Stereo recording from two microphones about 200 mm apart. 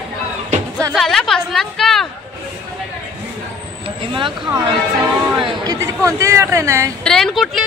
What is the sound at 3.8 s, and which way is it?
Vehicle, 25° right (ahead or behind).